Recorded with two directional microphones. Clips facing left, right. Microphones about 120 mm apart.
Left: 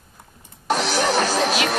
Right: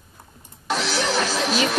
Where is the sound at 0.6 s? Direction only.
50° left (ahead or behind).